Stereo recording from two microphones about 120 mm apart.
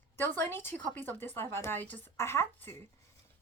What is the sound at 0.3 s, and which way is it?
Speech, 15° left (ahead or behind).